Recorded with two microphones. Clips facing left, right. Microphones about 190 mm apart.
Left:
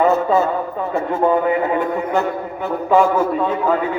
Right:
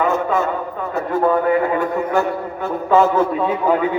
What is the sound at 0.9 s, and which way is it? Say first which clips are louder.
Speech: even; 25° left (ahead or behind).